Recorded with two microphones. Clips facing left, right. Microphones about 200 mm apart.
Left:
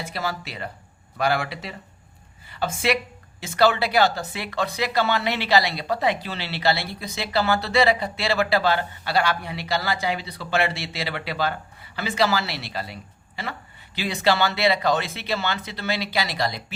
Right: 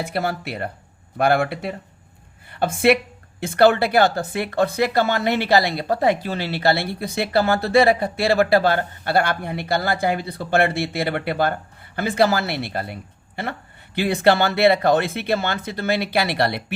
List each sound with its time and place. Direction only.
0.0 s speech: 55° right (ahead or behind)